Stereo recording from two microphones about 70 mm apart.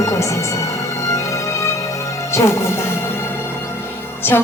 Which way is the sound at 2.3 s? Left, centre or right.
Left.